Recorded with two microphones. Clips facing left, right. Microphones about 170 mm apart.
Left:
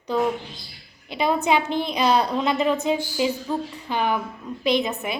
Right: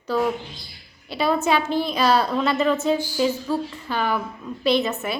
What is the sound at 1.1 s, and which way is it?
A woman's voice, 15° left (ahead or behind).